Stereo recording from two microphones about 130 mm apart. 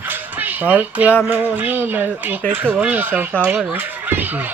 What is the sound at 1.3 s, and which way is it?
Speech, 15° right (ahead or behind).